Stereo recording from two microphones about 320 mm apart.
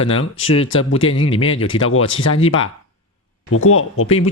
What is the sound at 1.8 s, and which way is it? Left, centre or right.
Speech, left.